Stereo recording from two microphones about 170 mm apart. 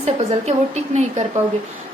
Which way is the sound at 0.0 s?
40° right (ahead or behind).